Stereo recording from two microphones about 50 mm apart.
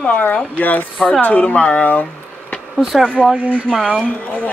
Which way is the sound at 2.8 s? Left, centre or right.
Centre.